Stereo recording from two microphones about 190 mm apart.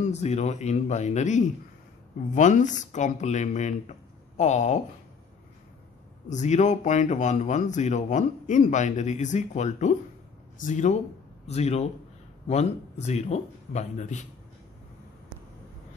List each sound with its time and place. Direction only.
0.2 s speech: 35° left (ahead or behind)
6.2 s speech: 40° left (ahead or behind)